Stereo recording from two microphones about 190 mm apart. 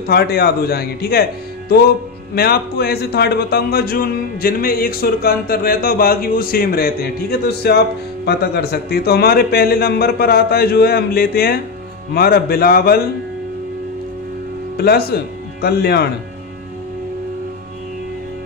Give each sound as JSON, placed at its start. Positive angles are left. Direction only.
{"t": 0.0, "sound": "a man's voice", "side_deg": 55}
{"t": 2.3, "sound": "a man's voice", "side_deg": 55}
{"t": 14.8, "sound": "speech", "side_deg": 55}